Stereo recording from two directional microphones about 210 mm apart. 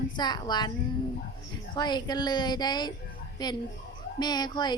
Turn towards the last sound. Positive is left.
turn(degrees=20)  # may be behind; listen again after turning